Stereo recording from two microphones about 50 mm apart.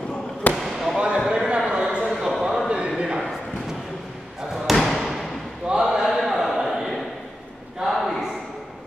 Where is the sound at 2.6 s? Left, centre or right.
Centre.